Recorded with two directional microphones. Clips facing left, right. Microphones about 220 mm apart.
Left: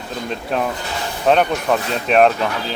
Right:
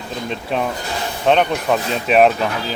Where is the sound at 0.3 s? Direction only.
Centre (ahead or behind).